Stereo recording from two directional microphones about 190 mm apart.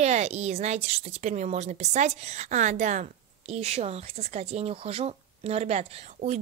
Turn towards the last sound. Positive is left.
turn(degrees=-35)  # may be behind; listen again after turning